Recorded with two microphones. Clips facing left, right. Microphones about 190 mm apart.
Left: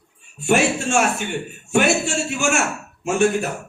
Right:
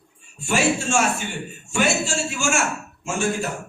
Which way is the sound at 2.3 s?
60° left (ahead or behind).